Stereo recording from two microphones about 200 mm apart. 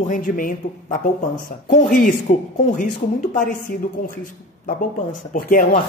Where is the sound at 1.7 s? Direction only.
40° left (ahead or behind).